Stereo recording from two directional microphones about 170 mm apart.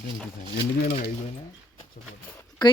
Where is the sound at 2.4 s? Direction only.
25° left (ahead or behind).